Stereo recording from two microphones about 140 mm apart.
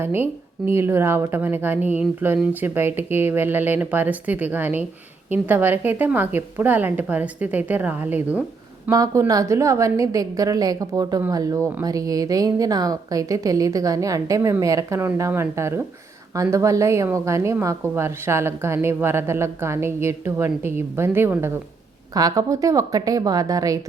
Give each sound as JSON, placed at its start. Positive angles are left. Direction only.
{"t": 0.0, "sound": "speech", "side_deg": -15}
{"t": 8.9, "sound": "speech", "side_deg": -25}
{"t": 22.1, "sound": "speech", "side_deg": -25}